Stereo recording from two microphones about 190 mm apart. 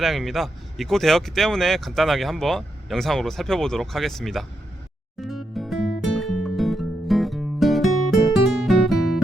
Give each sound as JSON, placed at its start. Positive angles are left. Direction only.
{"t": 0.0, "sound": "speech", "side_deg": 0}
{"t": 5.2, "sound": "music", "side_deg": 0}